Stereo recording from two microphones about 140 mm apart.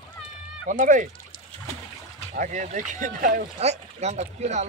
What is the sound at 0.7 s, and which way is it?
Speech, 65° right (ahead or behind).